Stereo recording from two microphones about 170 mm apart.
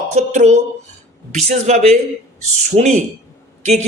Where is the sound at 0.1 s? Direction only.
40° right (ahead or behind).